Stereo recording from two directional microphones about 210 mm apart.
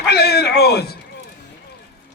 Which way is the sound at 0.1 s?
50° left (ahead or behind).